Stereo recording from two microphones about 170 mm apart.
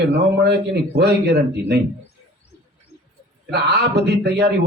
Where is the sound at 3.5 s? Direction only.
75° right (ahead or behind).